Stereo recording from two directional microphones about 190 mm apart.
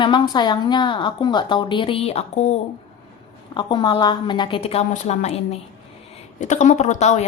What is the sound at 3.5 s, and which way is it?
A woman's voice, 25° left (ahead or behind).